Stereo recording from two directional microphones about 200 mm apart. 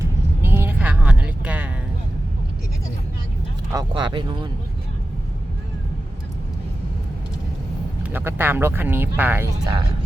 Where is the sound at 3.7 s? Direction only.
25° right (ahead or behind).